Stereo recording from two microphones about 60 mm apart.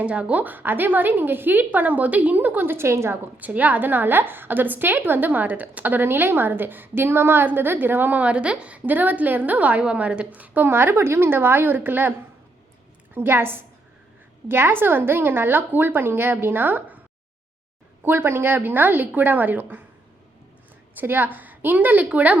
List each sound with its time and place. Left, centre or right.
0.0 s a woman's voice: right
3.3 s a woman's voice: right
13.1 s a woman's voice: right
18.0 s a woman's voice: right
20.9 s a woman's voice: right